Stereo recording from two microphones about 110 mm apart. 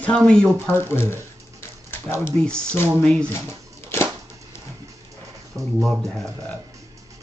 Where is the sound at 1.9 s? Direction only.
20° left (ahead or behind).